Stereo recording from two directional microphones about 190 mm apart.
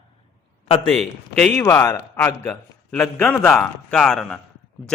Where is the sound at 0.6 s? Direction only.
30° left (ahead or behind).